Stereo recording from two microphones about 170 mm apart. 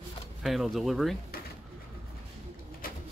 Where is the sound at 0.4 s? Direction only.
Centre (ahead or behind).